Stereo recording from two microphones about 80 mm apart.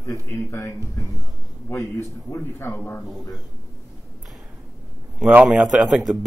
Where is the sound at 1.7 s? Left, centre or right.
Left.